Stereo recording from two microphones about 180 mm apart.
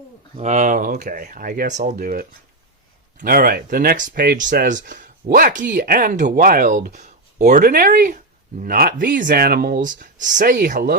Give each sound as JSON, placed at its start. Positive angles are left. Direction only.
{"t": 0.3, "sound": "speech", "side_deg": -40}